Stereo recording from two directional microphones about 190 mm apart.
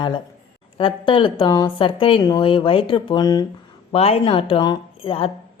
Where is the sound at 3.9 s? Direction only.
30° left (ahead or behind).